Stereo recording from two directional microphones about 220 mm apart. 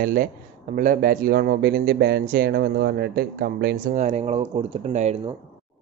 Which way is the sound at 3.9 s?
30° right (ahead or behind).